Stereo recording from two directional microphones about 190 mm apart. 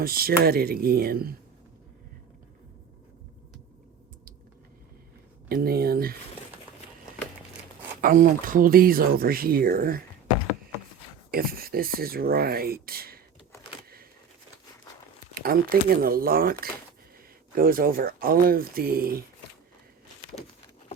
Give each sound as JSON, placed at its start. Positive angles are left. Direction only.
{"t": 0.0, "sound": "speech", "side_deg": -50}
{"t": 5.5, "sound": "speech", "side_deg": -50}
{"t": 8.0, "sound": "speech", "side_deg": -45}
{"t": 11.3, "sound": "speech", "side_deg": -50}
{"t": 15.4, "sound": "speech", "side_deg": -50}